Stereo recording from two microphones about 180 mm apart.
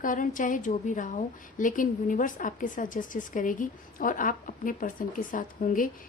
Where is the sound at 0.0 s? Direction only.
50° left (ahead or behind).